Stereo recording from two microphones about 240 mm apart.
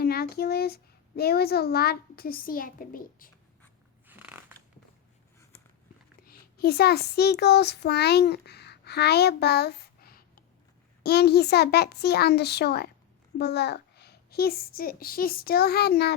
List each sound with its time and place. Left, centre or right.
0.0 s speech: left
4.0 s a sound: centre
6.2 s a child's voice: left